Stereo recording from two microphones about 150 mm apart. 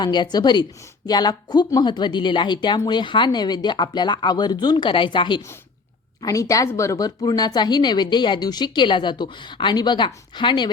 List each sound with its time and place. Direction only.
0.0 s a woman's voice: 30° left (ahead or behind)